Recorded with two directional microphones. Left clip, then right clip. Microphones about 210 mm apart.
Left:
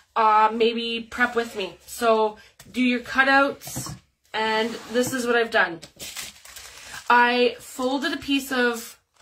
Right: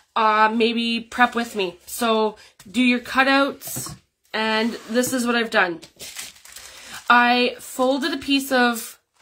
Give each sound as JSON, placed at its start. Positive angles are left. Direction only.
{"t": 0.1, "sound": "speech", "side_deg": -50}
{"t": 7.1, "sound": "speech", "side_deg": -50}